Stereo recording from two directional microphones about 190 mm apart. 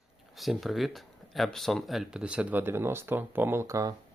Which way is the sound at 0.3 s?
Centre (ahead or behind).